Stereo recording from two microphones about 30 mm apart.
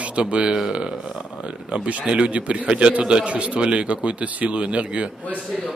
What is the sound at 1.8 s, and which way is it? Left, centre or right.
Speech, right.